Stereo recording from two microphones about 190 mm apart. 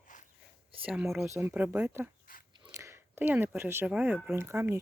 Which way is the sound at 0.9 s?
5° right (ahead or behind).